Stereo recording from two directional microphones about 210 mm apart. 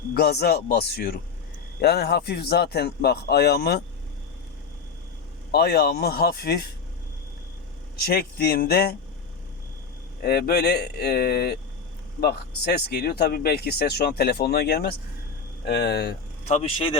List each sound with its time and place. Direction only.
0.1 s speech: 50° left (ahead or behind)
5.5 s speech: 50° left (ahead or behind)
8.0 s speech: 45° left (ahead or behind)
10.2 s speech: 45° left (ahead or behind)
16.5 s speech: 30° left (ahead or behind)